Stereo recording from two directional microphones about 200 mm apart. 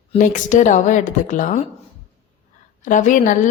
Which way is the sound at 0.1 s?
40° left (ahead or behind).